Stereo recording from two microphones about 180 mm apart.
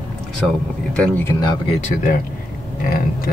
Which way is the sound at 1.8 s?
45° left (ahead or behind).